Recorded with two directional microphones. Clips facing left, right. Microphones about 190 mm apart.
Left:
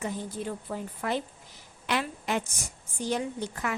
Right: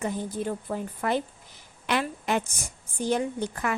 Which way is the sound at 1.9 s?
55° right (ahead or behind).